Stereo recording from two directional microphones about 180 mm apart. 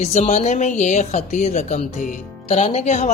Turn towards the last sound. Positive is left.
turn(degrees=40)  # may be behind; listen again after turning